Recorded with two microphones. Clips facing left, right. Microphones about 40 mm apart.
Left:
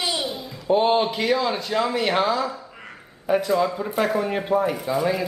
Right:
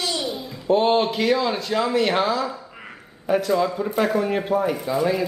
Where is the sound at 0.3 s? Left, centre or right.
Centre.